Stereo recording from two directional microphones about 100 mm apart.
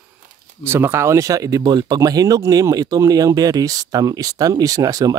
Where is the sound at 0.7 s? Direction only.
25° right (ahead or behind).